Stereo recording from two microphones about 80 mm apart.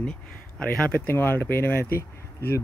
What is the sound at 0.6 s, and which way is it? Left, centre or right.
Speech, centre.